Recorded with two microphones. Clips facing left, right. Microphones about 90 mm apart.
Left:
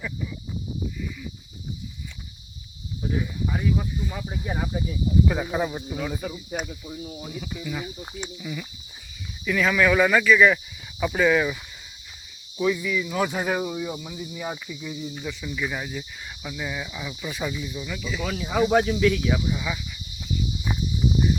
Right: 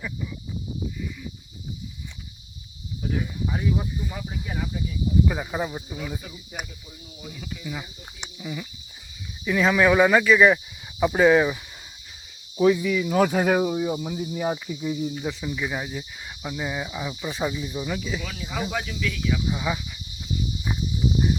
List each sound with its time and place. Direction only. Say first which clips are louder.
3.2 s cricket: left 1 dB; 5° right (ahead or behind)
3.9 s speech: left 1 dB; 5° right (ahead or behind)
4.4 s speech: left 4 dB; 35° left (ahead or behind)
5.2 s speech: left 2 dB; 5° right (ahead or behind)
6.5 s speech: left 5 dB; 60° left (ahead or behind)
7.6 s speech: left 2 dB; 5° right (ahead or behind)
8.2 s speech: right 1 dB; 20° right (ahead or behind); by 15.4 s 35° right (ahead or behind)
15.6 s speech: left 2 dB; 15° right (ahead or behind); by 18.2 s 35° right (ahead or behind)
18.2 s speech: left 7 dB; 50° left (ahead or behind)
19.5 s speech: right 2 dB; 25° right (ahead or behind)